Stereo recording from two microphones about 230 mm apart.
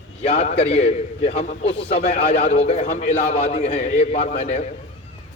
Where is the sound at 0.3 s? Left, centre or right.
Left.